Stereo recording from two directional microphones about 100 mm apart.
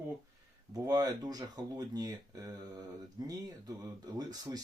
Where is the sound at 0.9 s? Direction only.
40° right (ahead or behind).